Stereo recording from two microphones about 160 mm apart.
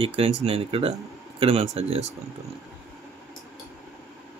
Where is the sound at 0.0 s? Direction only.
35° right (ahead or behind).